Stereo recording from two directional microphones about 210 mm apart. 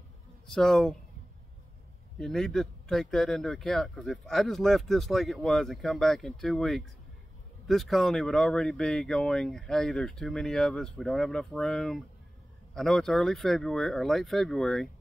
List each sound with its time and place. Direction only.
0.5 s speech: centre (ahead or behind)
2.1 s speech: 5° left (ahead or behind)